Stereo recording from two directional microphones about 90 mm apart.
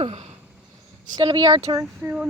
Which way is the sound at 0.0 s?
90° right.